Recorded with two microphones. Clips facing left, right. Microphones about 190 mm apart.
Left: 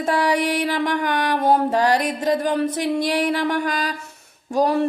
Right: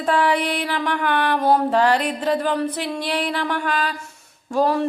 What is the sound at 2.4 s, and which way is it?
Speech, 25° left (ahead or behind).